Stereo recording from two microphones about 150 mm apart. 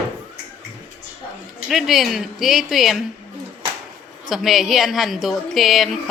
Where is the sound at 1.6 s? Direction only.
Centre (ahead or behind).